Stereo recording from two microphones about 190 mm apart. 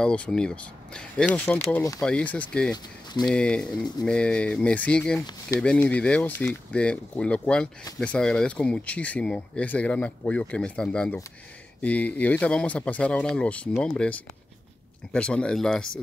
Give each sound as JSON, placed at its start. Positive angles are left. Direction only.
{"t": 0.0, "sound": "speech", "side_deg": 5}
{"t": 2.0, "sound": "speech", "side_deg": 5}
{"t": 2.7, "sound": "speech", "side_deg": 20}
{"t": 3.3, "sound": "speech", "side_deg": 5}
{"t": 15.1, "sound": "speech", "side_deg": 5}